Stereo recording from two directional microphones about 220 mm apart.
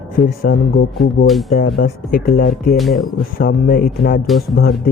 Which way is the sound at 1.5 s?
45° left (ahead or behind).